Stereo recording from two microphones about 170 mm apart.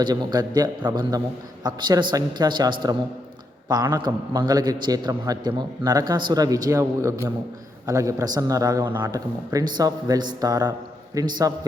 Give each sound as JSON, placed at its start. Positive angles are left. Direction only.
{"t": 0.0, "sound": "a man's voice", "side_deg": -25}